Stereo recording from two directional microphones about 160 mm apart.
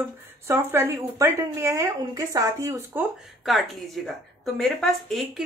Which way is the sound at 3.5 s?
Centre (ahead or behind).